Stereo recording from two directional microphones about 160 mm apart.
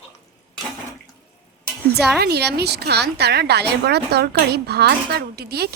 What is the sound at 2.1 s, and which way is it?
Speech, 85° right.